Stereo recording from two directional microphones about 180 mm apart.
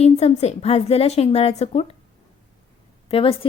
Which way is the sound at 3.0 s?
30° left (ahead or behind).